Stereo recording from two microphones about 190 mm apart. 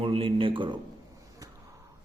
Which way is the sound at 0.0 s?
30° right (ahead or behind).